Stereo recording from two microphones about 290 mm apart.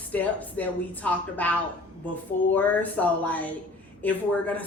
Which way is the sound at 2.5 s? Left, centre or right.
Centre.